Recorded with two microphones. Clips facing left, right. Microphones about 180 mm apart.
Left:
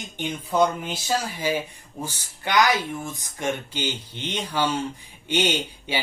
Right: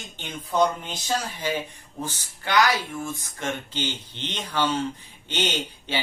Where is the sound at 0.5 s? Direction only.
10° left (ahead or behind).